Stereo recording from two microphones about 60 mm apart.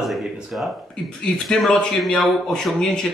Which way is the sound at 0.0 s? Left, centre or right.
Centre.